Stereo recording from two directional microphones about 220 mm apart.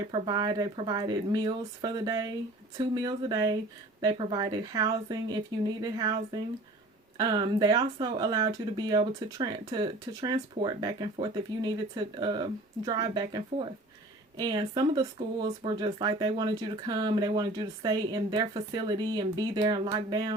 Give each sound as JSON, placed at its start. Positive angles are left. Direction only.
{"t": 0.3, "sound": "speech", "side_deg": -20}